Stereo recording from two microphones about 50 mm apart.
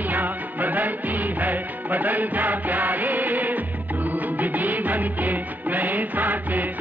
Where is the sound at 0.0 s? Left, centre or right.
Right.